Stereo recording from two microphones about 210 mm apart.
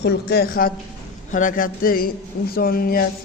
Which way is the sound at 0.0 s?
50° left (ahead or behind).